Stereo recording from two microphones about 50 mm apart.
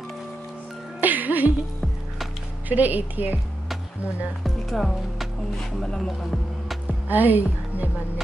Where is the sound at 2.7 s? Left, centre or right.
Right.